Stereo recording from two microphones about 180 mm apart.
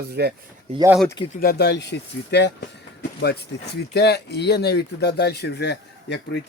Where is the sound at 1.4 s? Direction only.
60° left (ahead or behind).